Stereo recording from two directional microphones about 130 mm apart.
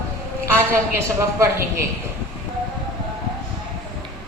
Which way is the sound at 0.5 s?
20° right (ahead or behind).